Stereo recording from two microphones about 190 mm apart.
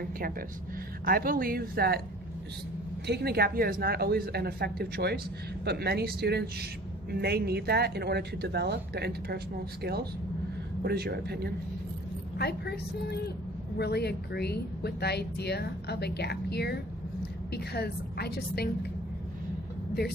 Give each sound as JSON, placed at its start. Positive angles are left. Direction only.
{"t": 0.0, "sound": "a woman's voice", "side_deg": -50}
{"t": 3.1, "sound": "speech", "side_deg": -55}
{"t": 12.4, "sound": "speech", "side_deg": 60}